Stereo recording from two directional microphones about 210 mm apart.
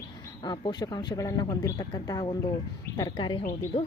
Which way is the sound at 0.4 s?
20° left (ahead or behind).